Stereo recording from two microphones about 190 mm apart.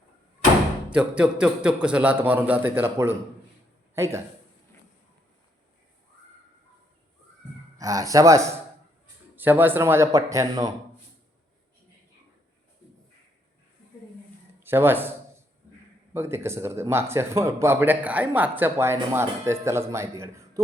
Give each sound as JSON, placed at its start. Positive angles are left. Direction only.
{"t": 0.9, "sound": "a man's voice", "side_deg": -5}
{"t": 7.8, "sound": "speech", "side_deg": -20}
{"t": 14.6, "sound": "speech", "side_deg": -10}
{"t": 16.1, "sound": "speech", "side_deg": -15}